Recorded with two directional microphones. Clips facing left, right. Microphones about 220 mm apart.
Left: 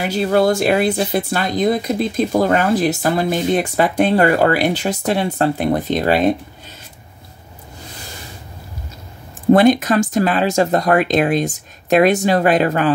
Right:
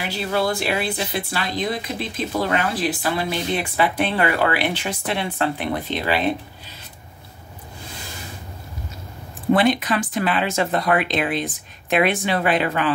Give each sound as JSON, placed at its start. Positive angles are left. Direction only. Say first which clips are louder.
{"t": 0.0, "sound": "speech", "louder": "left 7 dB", "side_deg": 45}
{"t": 9.5, "sound": "speech", "louder": "left 6 dB", "side_deg": 45}